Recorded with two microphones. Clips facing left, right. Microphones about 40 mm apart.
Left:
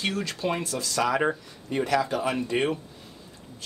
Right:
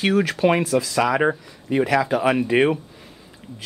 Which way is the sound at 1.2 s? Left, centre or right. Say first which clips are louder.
Right 5 dB; right.